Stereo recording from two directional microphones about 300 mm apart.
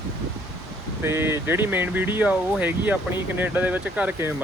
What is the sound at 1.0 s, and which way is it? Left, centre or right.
Speech, centre.